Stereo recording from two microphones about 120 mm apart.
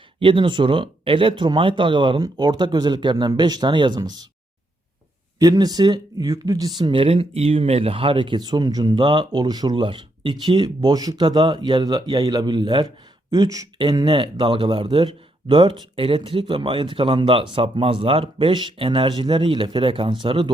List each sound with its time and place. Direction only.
0.2 s speech: 45° right (ahead or behind)
5.4 s speech: 35° right (ahead or behind)